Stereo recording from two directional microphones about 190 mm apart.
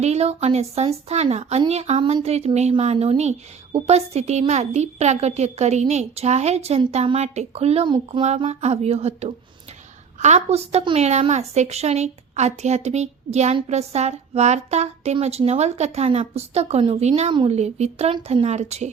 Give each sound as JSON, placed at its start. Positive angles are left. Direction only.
{"t": 0.0, "sound": "a woman's voice", "side_deg": -35}